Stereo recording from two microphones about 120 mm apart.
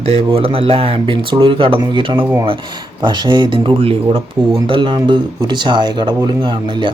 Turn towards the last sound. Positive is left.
turn(degrees=-40)  # may be behind; listen again after turning